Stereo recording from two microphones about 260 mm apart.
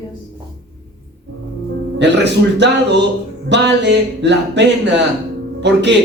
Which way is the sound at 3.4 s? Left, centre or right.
Right.